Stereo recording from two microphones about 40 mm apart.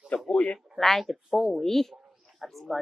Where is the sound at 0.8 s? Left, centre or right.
Centre.